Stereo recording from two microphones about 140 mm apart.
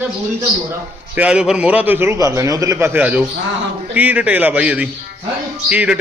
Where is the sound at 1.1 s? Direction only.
10° right (ahead or behind).